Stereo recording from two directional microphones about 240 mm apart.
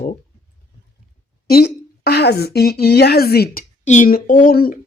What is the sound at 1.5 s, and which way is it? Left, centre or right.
A woman's voice, left.